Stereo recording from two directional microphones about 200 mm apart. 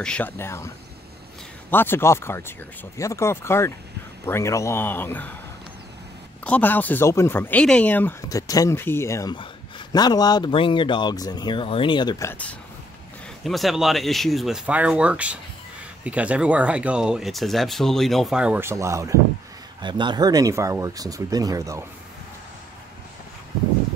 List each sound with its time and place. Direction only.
0.0 s speech: 5° left (ahead or behind)
1.7 s speech: 10° left (ahead or behind)
6.4 s speech: 10° left (ahead or behind); by 21.8 s 15° right (ahead or behind)